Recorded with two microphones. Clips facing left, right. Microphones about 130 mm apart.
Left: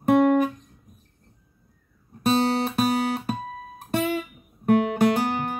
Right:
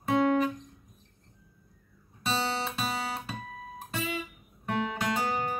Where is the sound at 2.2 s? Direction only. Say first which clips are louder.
Left 9 dB; 60° left (ahead or behind).